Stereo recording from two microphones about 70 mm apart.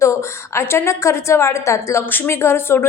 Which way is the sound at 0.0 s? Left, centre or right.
Left.